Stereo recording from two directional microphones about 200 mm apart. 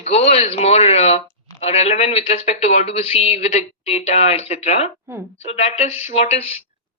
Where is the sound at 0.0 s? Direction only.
35° left (ahead or behind).